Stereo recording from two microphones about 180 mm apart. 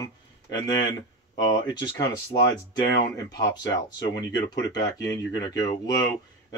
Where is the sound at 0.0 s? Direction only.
20° left (ahead or behind).